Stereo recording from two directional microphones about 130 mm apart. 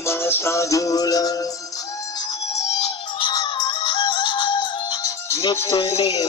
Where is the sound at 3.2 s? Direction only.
35° left (ahead or behind).